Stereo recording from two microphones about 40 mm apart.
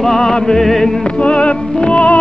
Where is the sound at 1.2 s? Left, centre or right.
Left.